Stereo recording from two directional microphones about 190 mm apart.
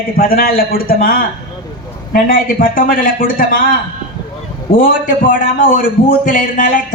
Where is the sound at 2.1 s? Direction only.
45° left (ahead or behind).